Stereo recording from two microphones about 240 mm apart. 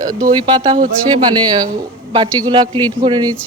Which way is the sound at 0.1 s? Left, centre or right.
Centre.